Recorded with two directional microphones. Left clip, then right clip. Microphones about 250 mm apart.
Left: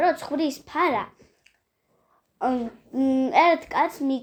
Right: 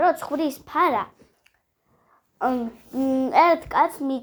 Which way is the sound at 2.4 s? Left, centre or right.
Centre.